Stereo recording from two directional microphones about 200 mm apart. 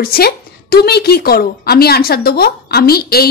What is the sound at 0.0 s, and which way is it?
A woman's voice, 50° left (ahead or behind).